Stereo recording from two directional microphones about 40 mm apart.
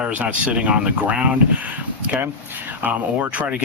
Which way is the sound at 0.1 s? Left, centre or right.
Right.